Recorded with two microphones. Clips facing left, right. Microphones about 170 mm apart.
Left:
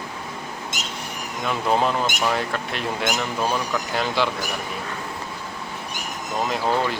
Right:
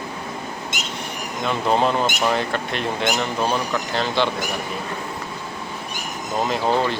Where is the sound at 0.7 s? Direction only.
40° left (ahead or behind).